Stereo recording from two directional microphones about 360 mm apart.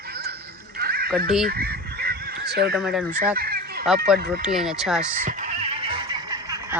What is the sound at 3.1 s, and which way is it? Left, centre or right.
Fowl, right.